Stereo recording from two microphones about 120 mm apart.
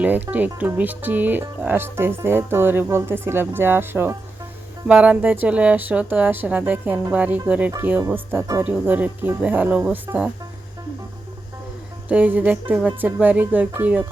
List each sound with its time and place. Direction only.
0.0 s speech: 15° right (ahead or behind)
12.0 s speech: 15° right (ahead or behind)